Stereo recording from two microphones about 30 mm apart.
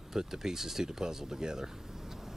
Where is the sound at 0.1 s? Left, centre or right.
Centre.